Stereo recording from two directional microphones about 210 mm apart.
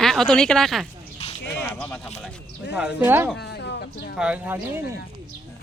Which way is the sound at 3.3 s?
55° left (ahead or behind).